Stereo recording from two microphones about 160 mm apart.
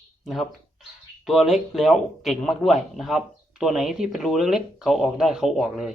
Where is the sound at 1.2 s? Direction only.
Centre (ahead or behind).